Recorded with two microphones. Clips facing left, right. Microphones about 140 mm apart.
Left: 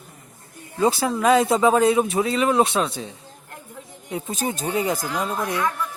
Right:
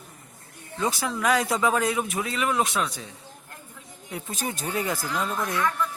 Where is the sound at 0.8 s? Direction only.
30° left (ahead or behind).